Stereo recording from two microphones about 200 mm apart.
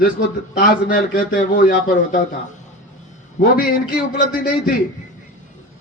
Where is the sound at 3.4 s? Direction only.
45° left (ahead or behind).